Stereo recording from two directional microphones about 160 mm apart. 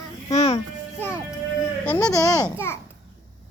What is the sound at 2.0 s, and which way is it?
Speech, 20° left (ahead or behind).